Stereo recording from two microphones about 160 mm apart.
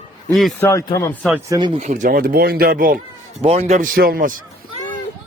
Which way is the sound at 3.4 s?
40° right (ahead or behind).